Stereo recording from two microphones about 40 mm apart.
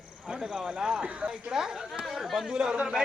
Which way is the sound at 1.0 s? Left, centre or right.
Right.